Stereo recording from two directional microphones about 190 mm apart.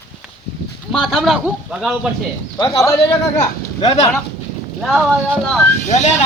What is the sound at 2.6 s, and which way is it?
Speech, 15° left (ahead or behind).